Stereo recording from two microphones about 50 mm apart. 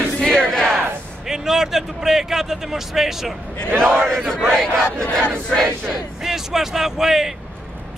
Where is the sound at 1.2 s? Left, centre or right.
Centre.